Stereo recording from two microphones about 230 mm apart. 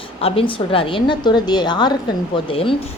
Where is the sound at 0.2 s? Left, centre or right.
Left.